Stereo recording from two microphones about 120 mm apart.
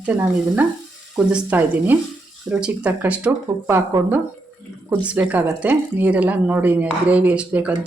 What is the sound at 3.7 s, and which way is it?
Speech, 20° right (ahead or behind).